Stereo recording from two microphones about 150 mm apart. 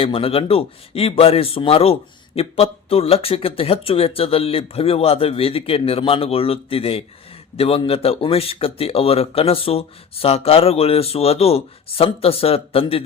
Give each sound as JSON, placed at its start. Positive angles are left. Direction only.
{"t": 0.0, "sound": "a man's voice", "side_deg": 40}